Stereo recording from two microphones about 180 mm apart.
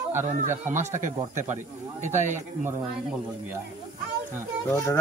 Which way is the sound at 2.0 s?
40° right (ahead or behind).